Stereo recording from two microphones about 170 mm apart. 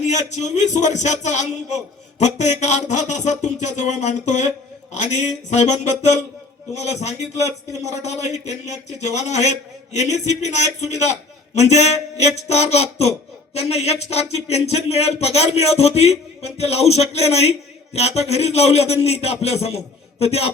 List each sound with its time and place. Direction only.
0.0 s a man's voice: 45° left (ahead or behind)